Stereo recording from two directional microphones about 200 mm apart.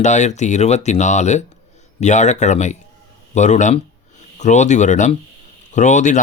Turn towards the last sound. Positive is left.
turn(degrees=35)  # may be behind; listen again after turning